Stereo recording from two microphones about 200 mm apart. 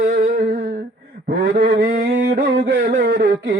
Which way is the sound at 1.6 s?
45° right (ahead or behind).